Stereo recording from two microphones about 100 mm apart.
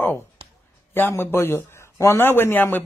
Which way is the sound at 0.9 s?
25° left (ahead or behind).